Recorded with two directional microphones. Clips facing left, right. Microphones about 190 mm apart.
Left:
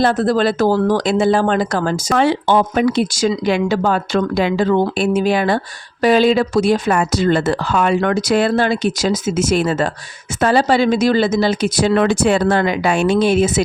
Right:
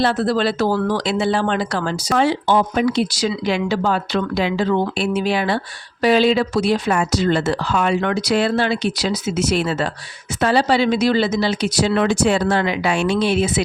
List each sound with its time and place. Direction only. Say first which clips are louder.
0.0 s speech: left 3 dB; 45° left (ahead or behind)